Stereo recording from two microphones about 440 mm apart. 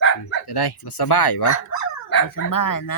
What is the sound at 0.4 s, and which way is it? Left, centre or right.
Speech, left.